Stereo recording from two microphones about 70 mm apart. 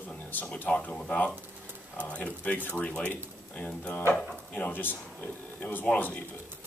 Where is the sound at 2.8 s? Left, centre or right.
Centre.